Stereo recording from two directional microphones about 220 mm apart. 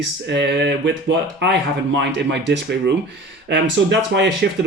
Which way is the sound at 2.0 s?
50° right (ahead or behind).